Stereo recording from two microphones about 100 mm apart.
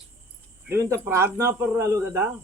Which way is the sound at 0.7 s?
30° right (ahead or behind).